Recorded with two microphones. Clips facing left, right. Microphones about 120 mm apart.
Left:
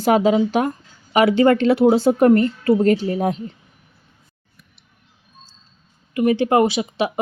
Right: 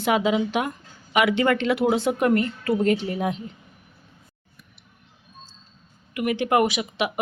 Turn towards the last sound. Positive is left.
turn(degrees=30)  # may be behind; listen again after turning